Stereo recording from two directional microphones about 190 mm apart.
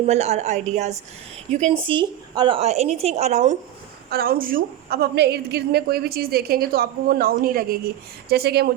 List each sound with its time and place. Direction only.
0.0 s speech: 35° right (ahead or behind)
4.1 s a woman's voice: 55° right (ahead or behind)